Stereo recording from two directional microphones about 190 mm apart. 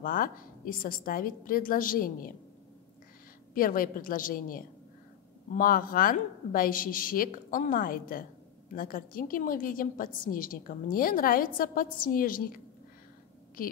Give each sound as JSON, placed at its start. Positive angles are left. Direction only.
{"t": 0.0, "sound": "a woman's voice", "side_deg": 45}
{"t": 3.5, "sound": "a woman's voice", "side_deg": 50}